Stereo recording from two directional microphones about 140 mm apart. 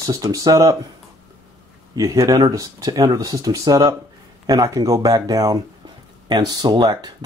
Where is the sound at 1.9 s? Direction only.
25° right (ahead or behind).